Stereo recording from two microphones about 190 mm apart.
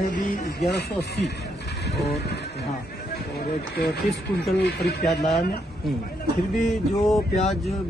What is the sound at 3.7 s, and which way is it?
Speech, 60° left (ahead or behind).